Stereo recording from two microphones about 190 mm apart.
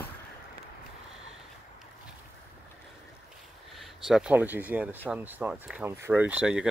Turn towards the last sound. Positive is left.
turn(degrees=-5)  # may be behind; listen again after turning